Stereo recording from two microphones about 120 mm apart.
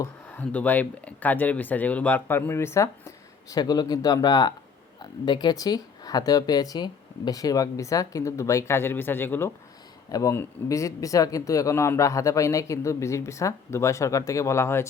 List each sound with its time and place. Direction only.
0.3 s speech: 15° left (ahead or behind)
3.5 s speech: 35° left (ahead or behind)